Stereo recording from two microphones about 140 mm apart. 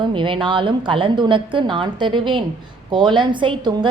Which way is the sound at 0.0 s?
35° right (ahead or behind).